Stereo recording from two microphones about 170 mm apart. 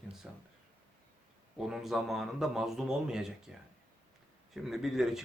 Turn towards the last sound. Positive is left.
turn(degrees=0)  # may be behind; listen again after turning